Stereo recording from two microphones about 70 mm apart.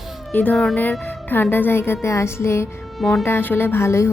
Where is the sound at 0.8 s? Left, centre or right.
Left.